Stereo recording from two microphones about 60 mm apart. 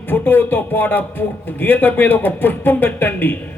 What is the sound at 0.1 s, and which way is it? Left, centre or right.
Speech, left.